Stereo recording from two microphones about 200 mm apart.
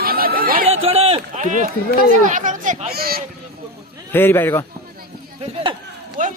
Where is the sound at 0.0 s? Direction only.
50° right (ahead or behind).